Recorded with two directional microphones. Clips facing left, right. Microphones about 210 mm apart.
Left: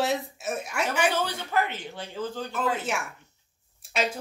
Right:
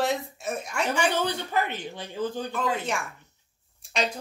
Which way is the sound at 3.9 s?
5° left (ahead or behind).